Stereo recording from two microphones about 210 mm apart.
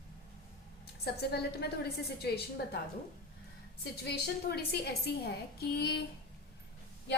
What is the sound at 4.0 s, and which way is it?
A woman's voice, 50° left (ahead or behind).